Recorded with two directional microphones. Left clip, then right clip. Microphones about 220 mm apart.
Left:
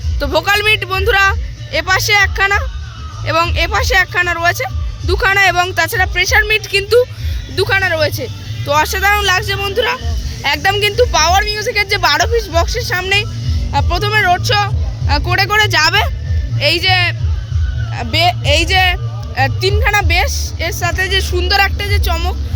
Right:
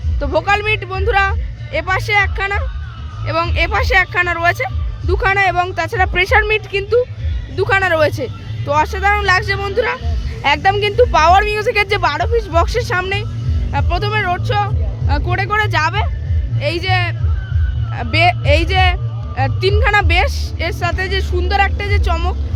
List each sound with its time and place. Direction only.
0.2 s speech: centre (ahead or behind)
6.1 s speech: 15° right (ahead or behind)
7.7 s speech: 20° right (ahead or behind)
8.6 s speech: 5° right (ahead or behind)
12.0 s speech: centre (ahead or behind)
12.6 s speech: 20° right (ahead or behind)
13.7 s speech: 5° right (ahead or behind); by 16.1 s 15° left (ahead or behind)
16.6 s speech: centre (ahead or behind)
21.8 s speech: 10° right (ahead or behind)